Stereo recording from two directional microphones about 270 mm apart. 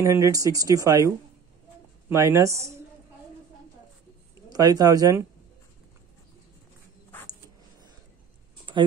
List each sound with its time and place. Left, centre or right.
0.0 s speech: centre
4.5 s speech: centre
8.7 s a sound: centre